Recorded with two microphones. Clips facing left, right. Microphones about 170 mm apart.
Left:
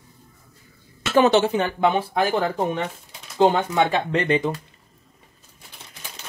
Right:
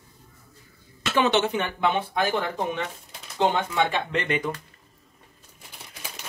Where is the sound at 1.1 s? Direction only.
35° left (ahead or behind).